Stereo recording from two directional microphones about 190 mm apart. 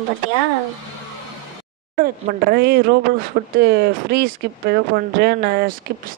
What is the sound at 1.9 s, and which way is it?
Speech, 50° right (ahead or behind).